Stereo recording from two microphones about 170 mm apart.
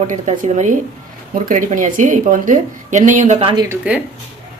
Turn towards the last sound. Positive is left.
turn(degrees=-5)  # may be behind; listen again after turning